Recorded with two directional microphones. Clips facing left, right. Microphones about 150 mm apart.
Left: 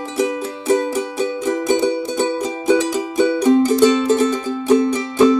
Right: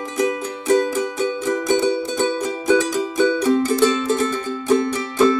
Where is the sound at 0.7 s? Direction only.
15° left (ahead or behind).